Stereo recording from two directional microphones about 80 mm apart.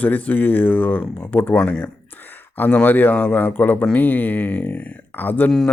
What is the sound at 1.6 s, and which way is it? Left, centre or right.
Speech, centre.